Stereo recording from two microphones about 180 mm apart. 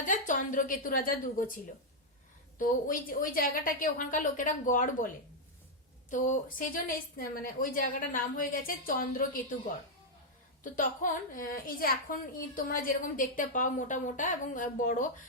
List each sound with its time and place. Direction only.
0.0 s a woman's voice: 45° left (ahead or behind)